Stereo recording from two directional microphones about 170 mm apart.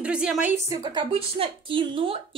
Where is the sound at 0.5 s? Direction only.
20° right (ahead or behind).